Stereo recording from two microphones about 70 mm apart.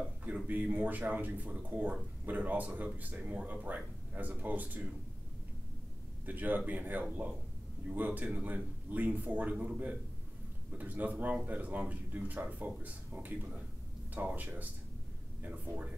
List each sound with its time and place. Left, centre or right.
0.5 s speech: right
6.2 s speech: right